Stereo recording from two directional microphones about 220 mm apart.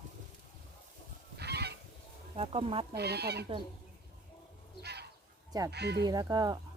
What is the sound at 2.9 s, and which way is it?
Speech, 50° right (ahead or behind).